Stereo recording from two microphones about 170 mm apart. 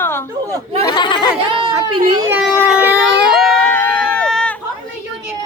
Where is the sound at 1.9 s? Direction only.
30° right (ahead or behind).